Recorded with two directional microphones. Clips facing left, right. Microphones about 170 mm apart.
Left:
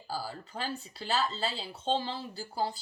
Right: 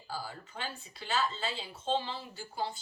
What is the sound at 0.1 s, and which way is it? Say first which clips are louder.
Speech: left 4 dB; 35° left (ahead or behind).